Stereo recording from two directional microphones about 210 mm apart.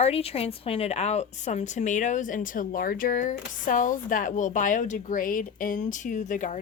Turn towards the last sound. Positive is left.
turn(degrees=35)  # may be behind; listen again after turning